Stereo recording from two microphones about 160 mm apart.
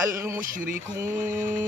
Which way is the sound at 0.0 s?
15° right (ahead or behind).